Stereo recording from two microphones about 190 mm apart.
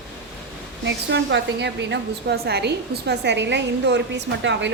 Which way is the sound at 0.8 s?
70° right (ahead or behind).